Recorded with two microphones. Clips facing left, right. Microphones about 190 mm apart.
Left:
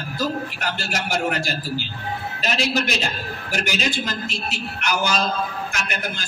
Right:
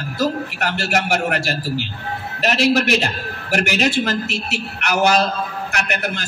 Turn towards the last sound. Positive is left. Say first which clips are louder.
# right 5 dB
turn(degrees=-70)  # may be behind; listen again after turning